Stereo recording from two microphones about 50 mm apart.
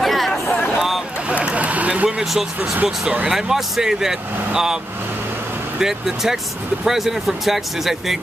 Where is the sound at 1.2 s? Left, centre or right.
Right.